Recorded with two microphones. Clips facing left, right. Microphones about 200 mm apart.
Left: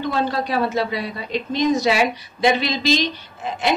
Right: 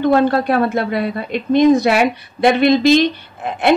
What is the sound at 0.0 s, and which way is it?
A woman's voice, 55° right (ahead or behind).